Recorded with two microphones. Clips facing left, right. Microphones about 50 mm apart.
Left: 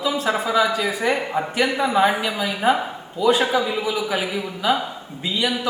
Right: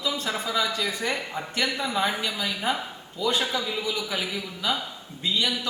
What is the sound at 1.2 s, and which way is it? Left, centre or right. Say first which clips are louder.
Speech: left 7 dB; left.